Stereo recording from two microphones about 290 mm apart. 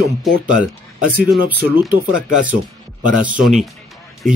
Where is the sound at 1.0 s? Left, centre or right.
Right.